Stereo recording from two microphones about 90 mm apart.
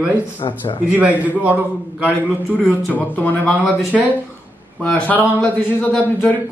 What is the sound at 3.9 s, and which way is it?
Speech, 5° right (ahead or behind).